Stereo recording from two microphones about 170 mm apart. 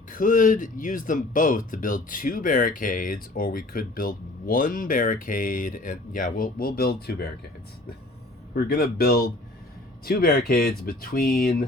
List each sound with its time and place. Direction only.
0.1 s speech: 50° left (ahead or behind)
8.5 s speech: 65° left (ahead or behind)